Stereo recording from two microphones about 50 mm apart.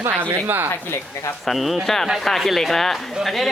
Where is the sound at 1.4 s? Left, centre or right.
Centre.